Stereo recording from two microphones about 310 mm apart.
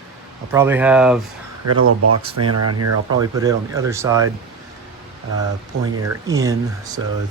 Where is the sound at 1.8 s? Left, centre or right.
Right.